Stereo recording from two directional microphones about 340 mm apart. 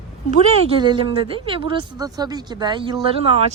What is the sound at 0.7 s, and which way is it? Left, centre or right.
Speech, centre.